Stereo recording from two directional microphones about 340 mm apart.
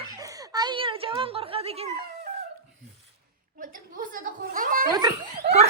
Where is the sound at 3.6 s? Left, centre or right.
Right.